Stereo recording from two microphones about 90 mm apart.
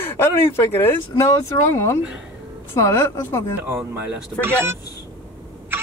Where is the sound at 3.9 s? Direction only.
25° right (ahead or behind).